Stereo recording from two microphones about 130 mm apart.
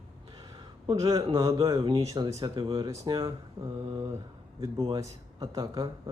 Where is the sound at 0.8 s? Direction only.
30° right (ahead or behind).